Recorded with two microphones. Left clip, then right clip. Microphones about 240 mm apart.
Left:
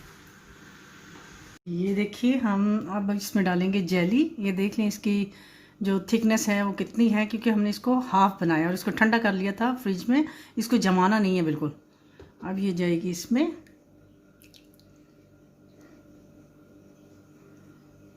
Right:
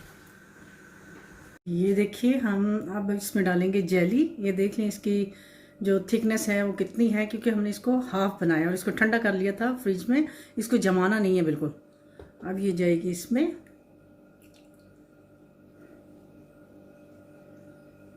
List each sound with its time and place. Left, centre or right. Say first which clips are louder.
1.6 s speech: right 4 dB; centre; by 13.5 s left